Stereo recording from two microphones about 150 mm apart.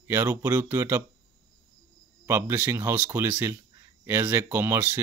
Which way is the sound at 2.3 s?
15° right (ahead or behind).